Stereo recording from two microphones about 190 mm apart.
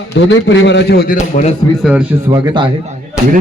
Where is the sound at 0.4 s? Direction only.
70° left (ahead or behind).